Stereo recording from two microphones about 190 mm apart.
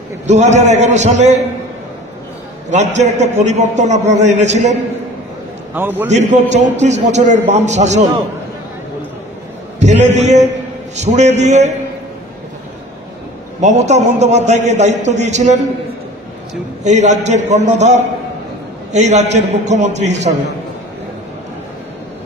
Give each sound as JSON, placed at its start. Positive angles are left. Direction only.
{"t": 0.3, "sound": "a man's voice", "side_deg": -35}
{"t": 2.7, "sound": "a man's voice", "side_deg": -40}
{"t": 5.8, "sound": "a man's voice", "side_deg": -10}
{"t": 6.0, "sound": "a man's voice", "side_deg": -35}
{"t": 9.8, "sound": "a man's voice", "side_deg": -35}
{"t": 13.6, "sound": "a man's voice", "side_deg": -35}
{"t": 16.8, "sound": "a man's voice", "side_deg": -40}